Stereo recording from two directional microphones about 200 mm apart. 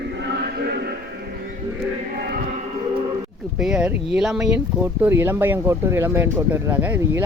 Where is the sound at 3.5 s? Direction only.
5° right (ahead or behind).